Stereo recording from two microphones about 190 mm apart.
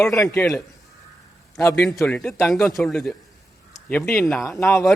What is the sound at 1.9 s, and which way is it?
A man's voice, 5° left (ahead or behind).